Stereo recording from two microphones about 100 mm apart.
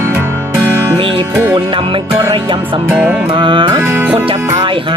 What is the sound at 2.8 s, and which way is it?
Music, 15° right (ahead or behind).